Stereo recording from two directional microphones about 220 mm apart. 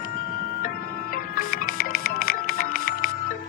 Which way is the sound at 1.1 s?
40° left (ahead or behind).